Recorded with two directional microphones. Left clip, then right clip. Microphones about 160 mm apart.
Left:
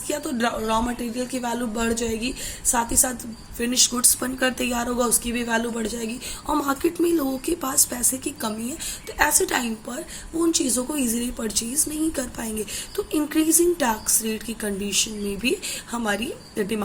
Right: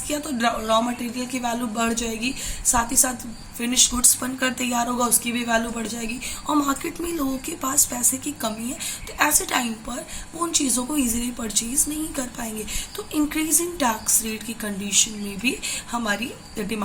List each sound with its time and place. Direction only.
0.1 s a woman's voice: 45° left (ahead or behind)